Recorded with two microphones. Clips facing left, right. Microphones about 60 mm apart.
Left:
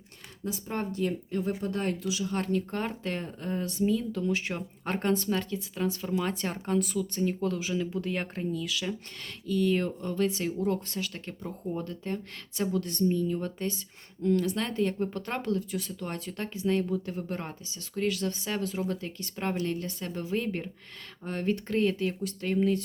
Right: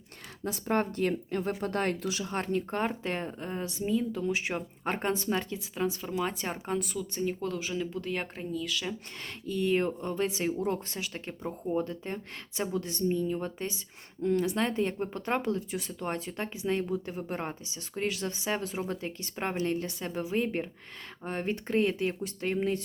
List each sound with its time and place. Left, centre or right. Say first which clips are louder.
0.4 s speech: right 4 dB; right; by 5.5 s centre
5.5 s speech: left 1 dB; centre
9.5 s speech: left 1 dB; right